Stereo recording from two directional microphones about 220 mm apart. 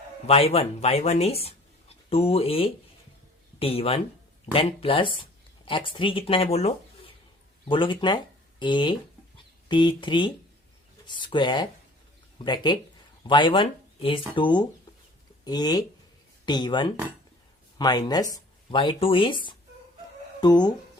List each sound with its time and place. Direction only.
0.3 s speech: 25° left (ahead or behind)